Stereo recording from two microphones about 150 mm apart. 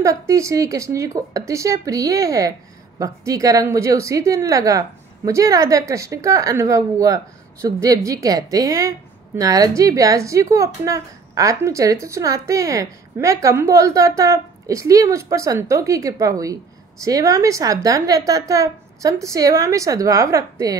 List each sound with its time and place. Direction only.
0.0 s a woman's voice: 20° right (ahead or behind)